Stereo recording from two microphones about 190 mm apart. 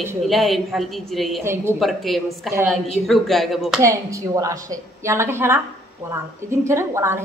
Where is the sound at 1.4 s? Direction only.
15° right (ahead or behind).